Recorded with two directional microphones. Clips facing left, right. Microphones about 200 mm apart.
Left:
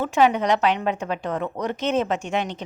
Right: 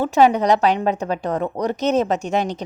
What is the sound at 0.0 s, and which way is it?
Speech, 35° right (ahead or behind).